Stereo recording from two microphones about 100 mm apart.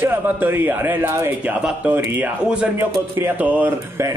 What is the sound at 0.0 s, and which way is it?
A man's voice, 20° right (ahead or behind).